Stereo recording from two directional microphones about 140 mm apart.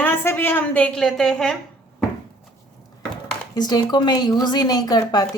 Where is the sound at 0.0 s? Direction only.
15° left (ahead or behind).